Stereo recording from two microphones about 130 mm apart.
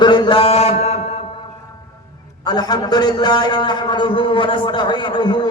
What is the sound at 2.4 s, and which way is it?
A man's voice, 30° left (ahead or behind).